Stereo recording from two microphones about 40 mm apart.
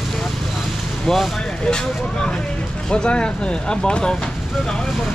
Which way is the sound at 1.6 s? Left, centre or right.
Centre.